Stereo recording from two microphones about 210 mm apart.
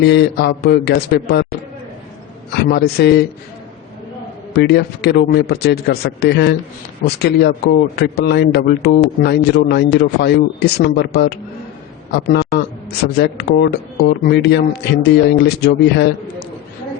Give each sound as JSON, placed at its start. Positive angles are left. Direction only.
{"t": 0.0, "sound": "speech", "side_deg": 50}
{"t": 2.5, "sound": "speech", "side_deg": 50}
{"t": 4.5, "sound": "a man's voice", "side_deg": 50}